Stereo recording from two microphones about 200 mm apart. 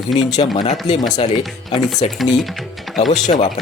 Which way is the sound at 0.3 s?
30° left (ahead or behind).